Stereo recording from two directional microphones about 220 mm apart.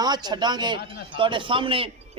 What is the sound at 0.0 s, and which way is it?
A man's voice, 20° right (ahead or behind).